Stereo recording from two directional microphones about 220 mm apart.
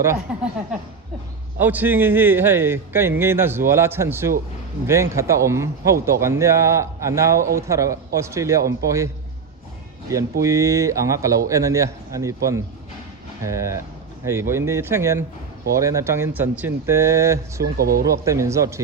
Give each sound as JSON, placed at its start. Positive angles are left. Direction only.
{"t": 0.3, "sound": "speech", "side_deg": -5}
{"t": 1.5, "sound": "a man's voice", "side_deg": -10}
{"t": 10.4, "sound": "a man's voice", "side_deg": -15}
{"t": 17.6, "sound": "speech", "side_deg": -45}
{"t": 18.0, "sound": "a man's voice", "side_deg": -15}